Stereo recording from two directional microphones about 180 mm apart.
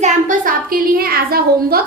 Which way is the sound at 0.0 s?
45° right (ahead or behind).